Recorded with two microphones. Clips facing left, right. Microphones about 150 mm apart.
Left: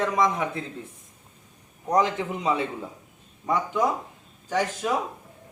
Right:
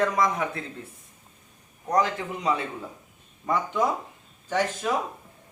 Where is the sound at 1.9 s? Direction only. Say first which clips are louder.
Left 2 dB; 20° left (ahead or behind).